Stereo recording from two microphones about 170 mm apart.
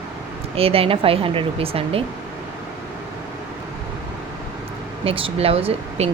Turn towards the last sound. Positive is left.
turn(degrees=-35)  # may be behind; listen again after turning